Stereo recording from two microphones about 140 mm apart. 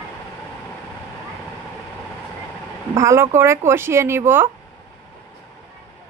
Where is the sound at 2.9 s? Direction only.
20° right (ahead or behind).